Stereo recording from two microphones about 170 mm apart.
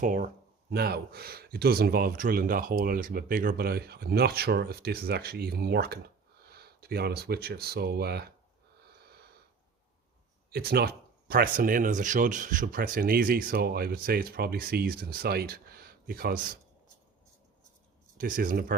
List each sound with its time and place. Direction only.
0.0 s speech: 50° right (ahead or behind)
0.7 s speech: 65° right (ahead or behind)
8.8 s wheeze: 70° right (ahead or behind)
10.5 s speech: 65° right (ahead or behind)
18.2 s speech: 55° right (ahead or behind)